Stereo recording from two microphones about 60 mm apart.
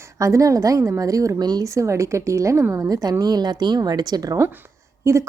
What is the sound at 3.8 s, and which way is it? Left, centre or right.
Speech, right.